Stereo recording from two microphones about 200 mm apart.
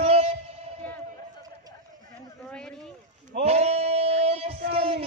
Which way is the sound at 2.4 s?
5° left (ahead or behind).